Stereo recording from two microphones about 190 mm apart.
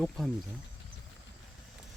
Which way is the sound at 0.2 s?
Centre (ahead or behind).